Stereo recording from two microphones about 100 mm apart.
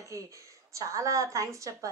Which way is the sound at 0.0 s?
35° right (ahead or behind).